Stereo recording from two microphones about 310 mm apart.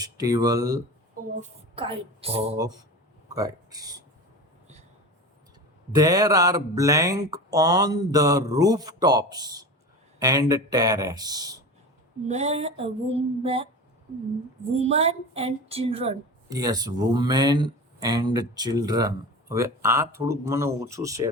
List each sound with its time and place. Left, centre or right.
0.0 s a woman's voice: centre
5.9 s a woman's voice: centre
12.3 s a sound: centre
14.8 s a woman's voice: centre